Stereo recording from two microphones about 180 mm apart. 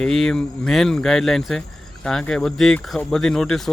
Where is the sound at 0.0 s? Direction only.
Centre (ahead or behind).